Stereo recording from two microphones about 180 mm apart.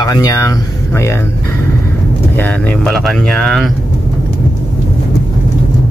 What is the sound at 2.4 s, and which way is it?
Speech, 5° left (ahead or behind).